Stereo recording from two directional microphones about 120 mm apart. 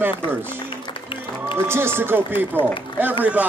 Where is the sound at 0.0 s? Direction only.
15° right (ahead or behind).